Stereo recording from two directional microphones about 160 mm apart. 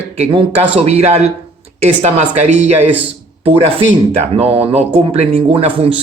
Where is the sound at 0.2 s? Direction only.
35° right (ahead or behind).